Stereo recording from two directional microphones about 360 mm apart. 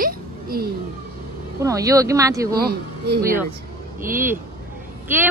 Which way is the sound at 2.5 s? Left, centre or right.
Right.